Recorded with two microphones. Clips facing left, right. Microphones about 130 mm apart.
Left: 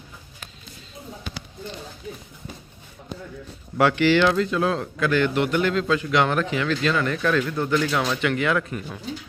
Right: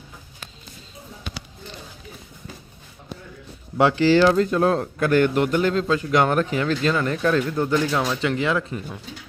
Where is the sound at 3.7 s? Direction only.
30° right (ahead or behind).